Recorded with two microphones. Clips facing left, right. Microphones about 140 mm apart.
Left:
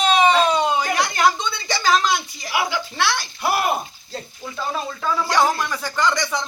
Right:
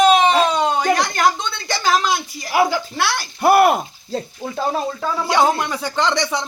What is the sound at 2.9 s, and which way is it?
Speech, 10° right (ahead or behind).